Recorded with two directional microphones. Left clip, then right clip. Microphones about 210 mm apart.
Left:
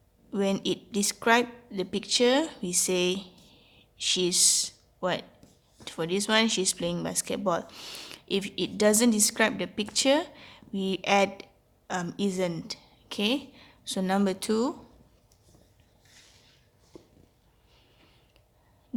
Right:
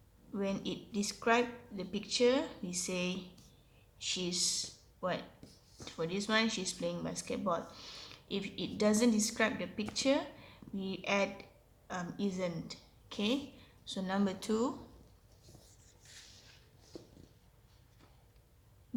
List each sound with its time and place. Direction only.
0.3 s a woman's voice: 50° left (ahead or behind)